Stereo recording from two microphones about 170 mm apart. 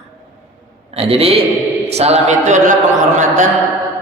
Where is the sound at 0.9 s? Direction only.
35° right (ahead or behind).